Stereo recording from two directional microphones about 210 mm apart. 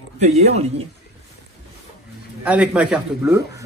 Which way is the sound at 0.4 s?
30° right (ahead or behind).